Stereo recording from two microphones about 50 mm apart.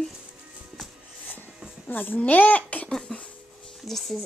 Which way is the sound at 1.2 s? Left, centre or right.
Left.